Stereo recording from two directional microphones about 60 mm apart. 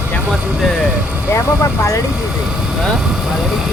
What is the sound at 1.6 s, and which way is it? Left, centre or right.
Speech, left.